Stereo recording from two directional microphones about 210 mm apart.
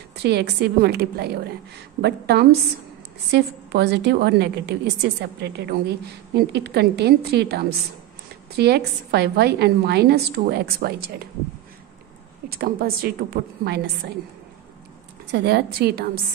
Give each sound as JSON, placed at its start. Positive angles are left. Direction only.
{"t": 0.1, "sound": "a woman's voice", "side_deg": -50}
{"t": 12.4, "sound": "a woman's voice", "side_deg": -45}
{"t": 15.3, "sound": "a woman's voice", "side_deg": -50}